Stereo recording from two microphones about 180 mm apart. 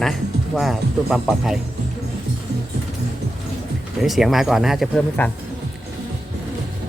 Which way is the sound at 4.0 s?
Centre (ahead or behind).